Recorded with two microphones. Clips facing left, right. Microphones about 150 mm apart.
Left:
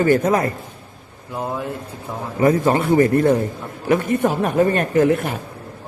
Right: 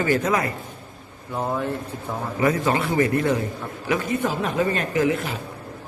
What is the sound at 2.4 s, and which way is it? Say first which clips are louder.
Speech: left 5 dB; 45° left (ahead or behind).